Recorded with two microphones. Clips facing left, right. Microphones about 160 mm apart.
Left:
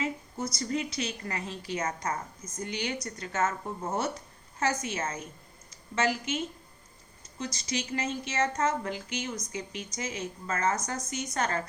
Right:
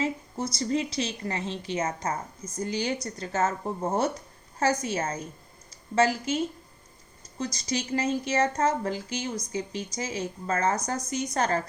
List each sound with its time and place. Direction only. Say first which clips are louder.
0.0 s a woman's voice: right 3 dB; 30° right (ahead or behind)